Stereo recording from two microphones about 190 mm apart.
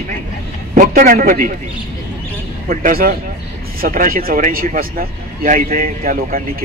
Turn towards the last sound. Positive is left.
turn(degrees=-45)  # may be behind; listen again after turning